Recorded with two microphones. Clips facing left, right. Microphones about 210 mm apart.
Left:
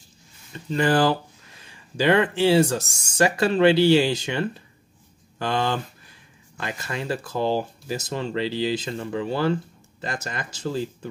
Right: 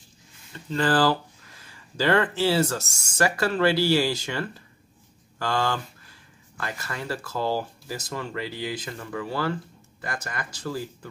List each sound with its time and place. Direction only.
0.7 s speech: 15° left (ahead or behind)